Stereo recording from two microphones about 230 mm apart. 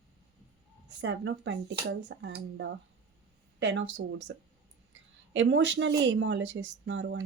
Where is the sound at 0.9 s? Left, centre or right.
Right.